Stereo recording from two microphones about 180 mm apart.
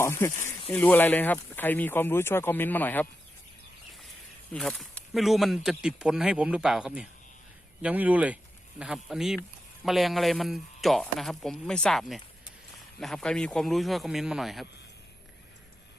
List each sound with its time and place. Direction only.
0.0 s speech: 15° left (ahead or behind)
0.3 s speech: 40° left (ahead or behind)
0.7 s speech: 10° left (ahead or behind)
4.5 s speech: centre (ahead or behind)